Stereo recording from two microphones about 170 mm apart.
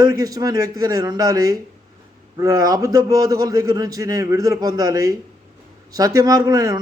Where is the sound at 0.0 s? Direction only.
20° right (ahead or behind).